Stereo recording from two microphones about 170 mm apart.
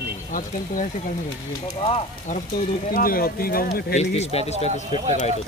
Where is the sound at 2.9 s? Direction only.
60° left (ahead or behind).